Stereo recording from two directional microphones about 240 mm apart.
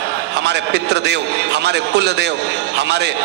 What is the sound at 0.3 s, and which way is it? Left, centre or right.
A man's voice, right.